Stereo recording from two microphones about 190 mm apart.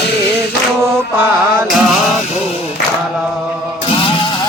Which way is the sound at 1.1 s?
10° right (ahead or behind).